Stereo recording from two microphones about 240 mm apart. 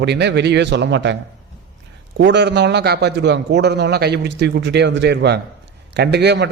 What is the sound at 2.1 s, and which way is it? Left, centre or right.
A man's voice, right.